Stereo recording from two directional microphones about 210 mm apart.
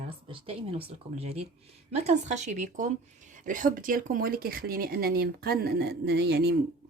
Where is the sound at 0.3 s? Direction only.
25° right (ahead or behind).